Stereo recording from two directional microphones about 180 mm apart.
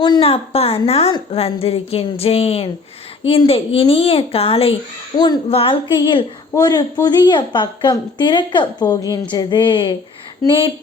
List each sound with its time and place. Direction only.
0.0 s a woman's voice: 25° left (ahead or behind)